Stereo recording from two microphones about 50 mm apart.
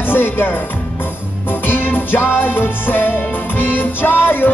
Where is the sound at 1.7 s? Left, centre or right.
Left.